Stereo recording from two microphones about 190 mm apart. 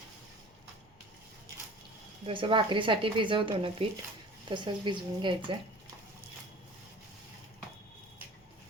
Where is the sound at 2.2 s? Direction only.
25° right (ahead or behind).